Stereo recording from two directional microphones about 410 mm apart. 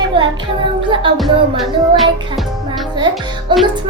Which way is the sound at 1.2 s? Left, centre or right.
Centre.